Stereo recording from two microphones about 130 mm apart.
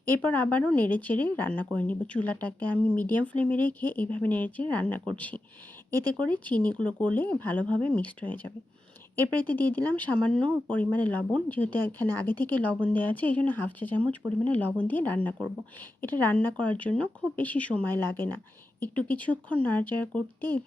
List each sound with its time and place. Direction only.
0.1 s speech: 15° left (ahead or behind)
5.9 s speech: 30° right (ahead or behind)
6.1 s speech: 10° left (ahead or behind)